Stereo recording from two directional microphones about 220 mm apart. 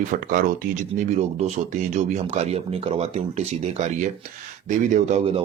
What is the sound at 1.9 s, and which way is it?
Speech, 30° right (ahead or behind).